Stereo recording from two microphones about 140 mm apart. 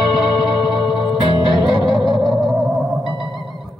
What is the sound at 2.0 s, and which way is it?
Music, centre (ahead or behind).